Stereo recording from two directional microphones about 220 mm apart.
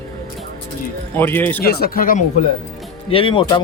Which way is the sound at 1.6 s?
45° left (ahead or behind).